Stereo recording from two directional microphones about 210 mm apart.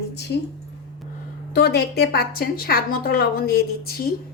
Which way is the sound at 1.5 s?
50° left (ahead or behind).